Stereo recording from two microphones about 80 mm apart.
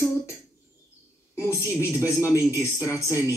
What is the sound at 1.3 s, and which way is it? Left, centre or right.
A man's voice, left.